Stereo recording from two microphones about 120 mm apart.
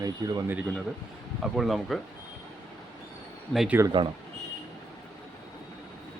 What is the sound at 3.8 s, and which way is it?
Speech, 20° right (ahead or behind).